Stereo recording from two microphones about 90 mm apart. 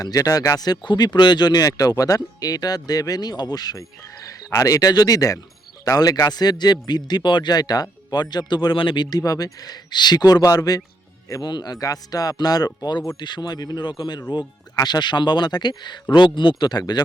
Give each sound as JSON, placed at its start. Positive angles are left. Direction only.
{"t": 0.0, "sound": "speech", "side_deg": 40}
{"t": 9.0, "sound": "speech", "side_deg": 45}